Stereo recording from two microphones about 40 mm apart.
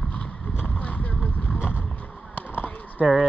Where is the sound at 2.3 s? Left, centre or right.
Left.